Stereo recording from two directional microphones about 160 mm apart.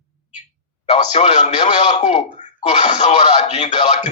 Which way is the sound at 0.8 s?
45° left (ahead or behind).